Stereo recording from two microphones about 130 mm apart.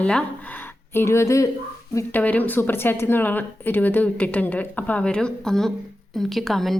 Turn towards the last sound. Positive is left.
turn(degrees=0)  # may be behind; listen again after turning